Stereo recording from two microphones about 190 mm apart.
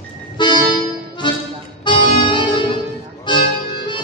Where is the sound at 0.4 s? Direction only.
25° left (ahead or behind).